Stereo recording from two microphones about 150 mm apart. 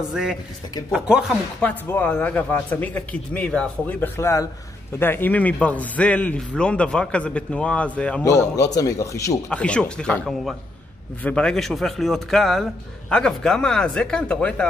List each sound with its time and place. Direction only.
0.1 s speech: 5° right (ahead or behind)
1.6 s a man's voice: 15° left (ahead or behind)
8.2 s a man's voice: 20° left (ahead or behind)
9.5 s a man's voice: 5° left (ahead or behind)